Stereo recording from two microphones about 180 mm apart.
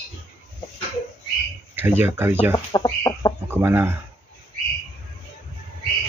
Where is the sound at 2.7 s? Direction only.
20° left (ahead or behind).